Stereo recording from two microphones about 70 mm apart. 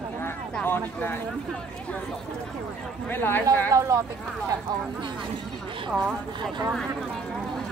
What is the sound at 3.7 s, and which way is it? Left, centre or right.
Speech, right.